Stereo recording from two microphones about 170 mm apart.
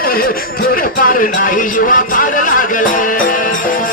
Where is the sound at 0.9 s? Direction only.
50° left (ahead or behind).